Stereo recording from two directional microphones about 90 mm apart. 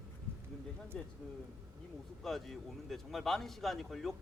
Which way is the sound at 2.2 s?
5° left (ahead or behind).